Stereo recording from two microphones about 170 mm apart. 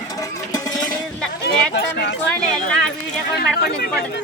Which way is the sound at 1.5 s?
90° left.